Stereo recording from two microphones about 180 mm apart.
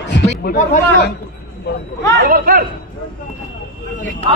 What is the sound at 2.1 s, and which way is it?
Speech, 60° right (ahead or behind).